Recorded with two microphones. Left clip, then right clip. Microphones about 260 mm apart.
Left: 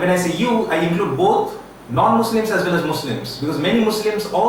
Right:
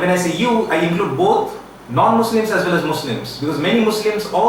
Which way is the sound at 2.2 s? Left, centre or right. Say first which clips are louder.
Right 2 dB; centre.